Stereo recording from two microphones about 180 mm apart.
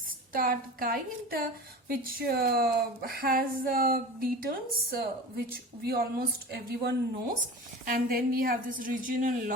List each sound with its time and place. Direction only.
0.3 s a woman's voice: 50° right (ahead or behind)